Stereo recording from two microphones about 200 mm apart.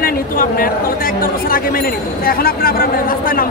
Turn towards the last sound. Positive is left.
turn(degrees=45)  # may be behind; listen again after turning